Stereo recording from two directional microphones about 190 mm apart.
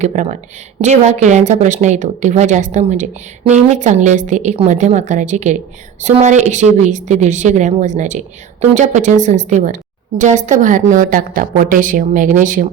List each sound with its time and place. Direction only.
0.0 s a woman's voice: 40° right (ahead or behind)